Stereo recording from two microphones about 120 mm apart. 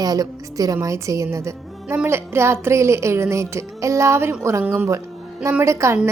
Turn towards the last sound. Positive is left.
turn(degrees=-25)  # may be behind; listen again after turning